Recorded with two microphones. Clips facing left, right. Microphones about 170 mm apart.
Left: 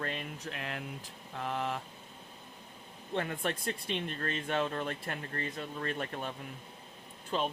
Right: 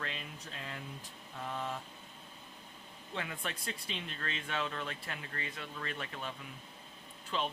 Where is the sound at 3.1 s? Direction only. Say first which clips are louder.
Left 7 dB; 50° left (ahead or behind).